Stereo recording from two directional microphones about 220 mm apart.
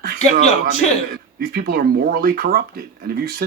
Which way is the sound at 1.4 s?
45° right (ahead or behind).